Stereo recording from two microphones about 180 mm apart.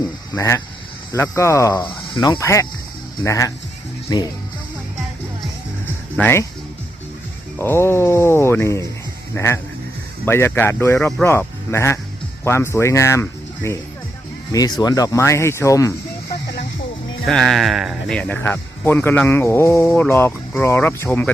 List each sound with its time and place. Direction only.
0.3 s speech: 15° left (ahead or behind)
2.4 s speech: 15° left (ahead or behind)
6.1 s speech: 10° left (ahead or behind)
7.6 s speech: 15° left (ahead or behind)
17.2 s speech: centre (ahead or behind)